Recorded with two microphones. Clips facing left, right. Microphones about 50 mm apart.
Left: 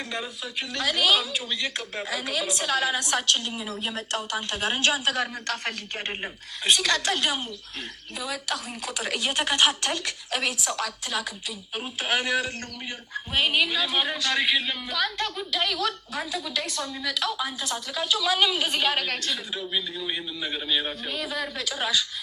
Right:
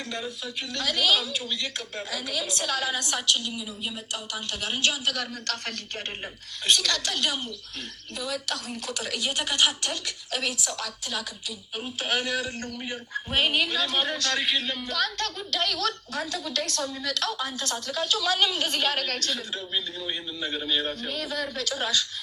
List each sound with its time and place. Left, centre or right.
0.1 s speech: left
3.3 s speech: left
5.3 s a man's voice: centre
9.0 s speech: left
12.9 s a man's voice: centre